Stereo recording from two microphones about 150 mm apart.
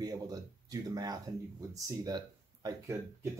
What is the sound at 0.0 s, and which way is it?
Speech, 25° right (ahead or behind).